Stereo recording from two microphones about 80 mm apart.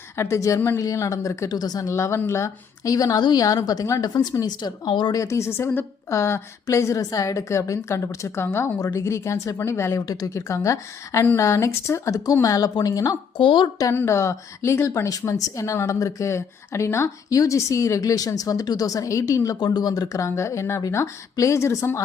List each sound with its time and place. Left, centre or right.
0.2 s a woman's voice: left
1.5 s speech: left
1.9 s a woman's voice: left
4.1 s speech: left
5.1 s a woman's voice: left
10.1 s a woman's voice: left
13.4 s speech: left
13.9 s a woman's voice: left
19.5 s speech: left
20.1 s a woman's voice: left